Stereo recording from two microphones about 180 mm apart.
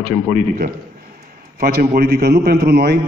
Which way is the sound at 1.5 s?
55° right (ahead or behind).